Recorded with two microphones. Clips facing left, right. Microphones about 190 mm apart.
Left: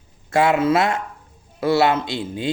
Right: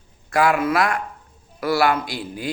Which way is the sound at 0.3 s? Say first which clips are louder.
Left 2 dB; 25° left (ahead or behind).